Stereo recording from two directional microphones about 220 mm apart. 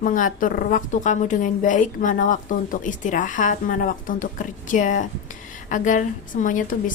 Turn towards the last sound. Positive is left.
turn(degrees=35)  # may be behind; listen again after turning